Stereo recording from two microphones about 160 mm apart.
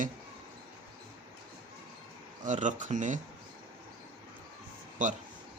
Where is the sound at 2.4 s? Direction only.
50° right (ahead or behind).